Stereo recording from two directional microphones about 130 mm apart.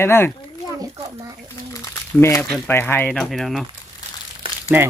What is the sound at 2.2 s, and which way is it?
Speech, 20° left (ahead or behind).